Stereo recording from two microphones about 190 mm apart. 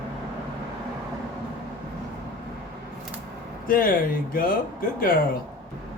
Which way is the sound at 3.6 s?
50° left (ahead or behind).